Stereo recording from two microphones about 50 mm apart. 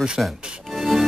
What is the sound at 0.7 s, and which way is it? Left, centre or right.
Music, centre.